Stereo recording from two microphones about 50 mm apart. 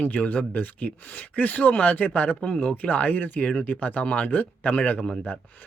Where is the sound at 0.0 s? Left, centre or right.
Left.